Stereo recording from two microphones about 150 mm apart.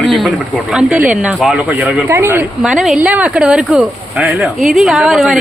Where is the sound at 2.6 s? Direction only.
5° right (ahead or behind).